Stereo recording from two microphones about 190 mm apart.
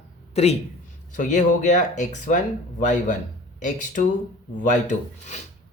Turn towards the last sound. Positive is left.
turn(degrees=40)  # may be behind; listen again after turning